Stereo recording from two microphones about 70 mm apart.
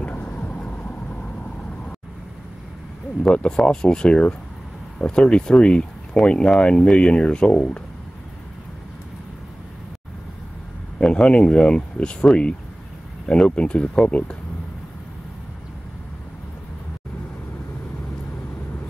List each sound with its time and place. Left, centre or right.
0.0 s vehicle: centre
3.3 s speech: centre
11.0 s speech: centre